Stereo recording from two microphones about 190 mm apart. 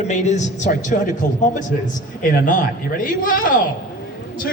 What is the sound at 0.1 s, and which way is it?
A man's voice, 35° left (ahead or behind).